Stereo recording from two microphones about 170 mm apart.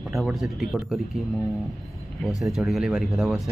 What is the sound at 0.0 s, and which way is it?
Speech, centre (ahead or behind).